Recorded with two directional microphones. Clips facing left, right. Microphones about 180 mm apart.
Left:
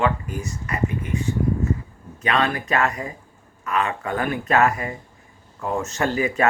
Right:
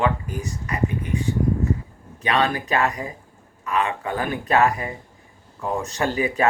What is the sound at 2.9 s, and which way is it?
Speech, 35° left (ahead or behind).